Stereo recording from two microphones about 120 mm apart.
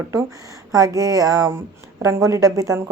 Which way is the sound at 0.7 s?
30° right (ahead or behind).